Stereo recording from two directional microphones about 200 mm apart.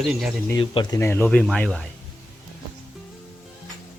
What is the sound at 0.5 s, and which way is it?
Speech, 20° left (ahead or behind).